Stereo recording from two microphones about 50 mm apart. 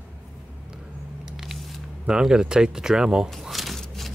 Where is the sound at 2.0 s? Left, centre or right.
Centre.